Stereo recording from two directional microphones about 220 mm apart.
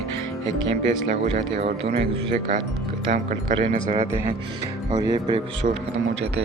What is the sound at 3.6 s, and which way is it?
Speech, 35° right (ahead or behind).